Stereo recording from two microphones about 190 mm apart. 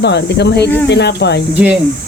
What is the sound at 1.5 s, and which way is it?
Speech, 5° right (ahead or behind).